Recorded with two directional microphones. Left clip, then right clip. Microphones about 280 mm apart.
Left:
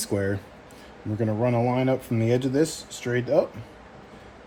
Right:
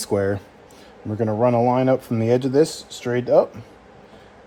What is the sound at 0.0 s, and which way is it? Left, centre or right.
Speech, right.